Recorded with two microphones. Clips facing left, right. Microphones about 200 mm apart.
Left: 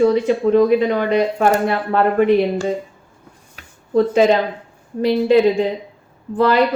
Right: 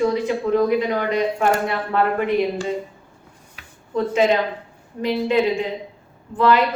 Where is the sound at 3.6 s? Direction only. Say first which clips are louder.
Left 2 dB; 40° left (ahead or behind).